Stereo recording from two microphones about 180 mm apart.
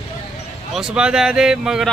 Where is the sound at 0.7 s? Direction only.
5° right (ahead or behind).